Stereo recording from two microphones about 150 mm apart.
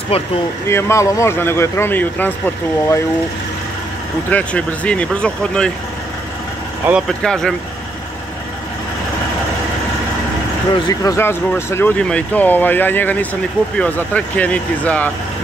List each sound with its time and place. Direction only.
0.1 s speech: 40° left (ahead or behind)
0.7 s speech: 15° left (ahead or behind)
4.3 s speech: 10° left (ahead or behind)
6.9 s speech: centre (ahead or behind)
10.9 s speech: 20° left (ahead or behind)